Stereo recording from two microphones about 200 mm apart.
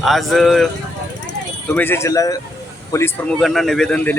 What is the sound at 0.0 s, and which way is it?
Speech, centre (ahead or behind).